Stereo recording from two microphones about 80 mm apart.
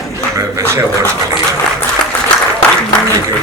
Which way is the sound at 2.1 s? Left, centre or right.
Left.